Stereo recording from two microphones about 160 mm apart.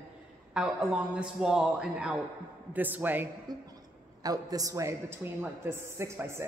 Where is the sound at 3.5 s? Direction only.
25° right (ahead or behind).